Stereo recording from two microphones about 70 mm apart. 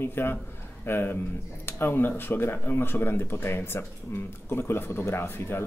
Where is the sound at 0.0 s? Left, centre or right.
Left.